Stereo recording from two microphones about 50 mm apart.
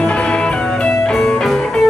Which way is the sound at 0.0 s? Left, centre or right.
Left.